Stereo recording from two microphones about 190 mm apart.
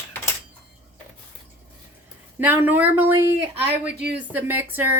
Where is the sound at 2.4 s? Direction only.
10° right (ahead or behind).